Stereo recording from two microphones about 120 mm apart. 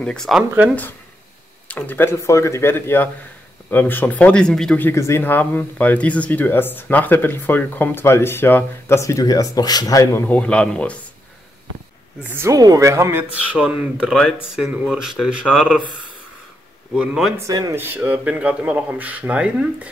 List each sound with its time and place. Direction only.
0.0 s speech: 5° left (ahead or behind)
1.7 s speech: 15° left (ahead or behind)
4.8 s speech: 20° left (ahead or behind)
10.2 s speech: 10° left (ahead or behind)
12.2 s speech: 20° right (ahead or behind)
12.5 s speech: 30° right (ahead or behind)
13.6 s speech: 10° right (ahead or behind)
16.9 s speech: 5° right (ahead or behind)
17.5 s speech: 30° right (ahead or behind)
17.7 s speech: 15° right (ahead or behind)